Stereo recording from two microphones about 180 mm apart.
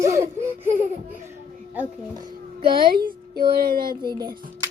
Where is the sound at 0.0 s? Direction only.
15° right (ahead or behind).